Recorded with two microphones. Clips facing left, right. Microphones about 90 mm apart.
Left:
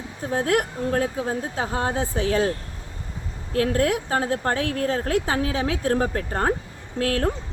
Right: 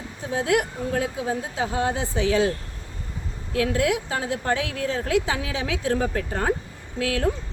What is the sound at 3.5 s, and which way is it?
A woman's voice, 45° left (ahead or behind).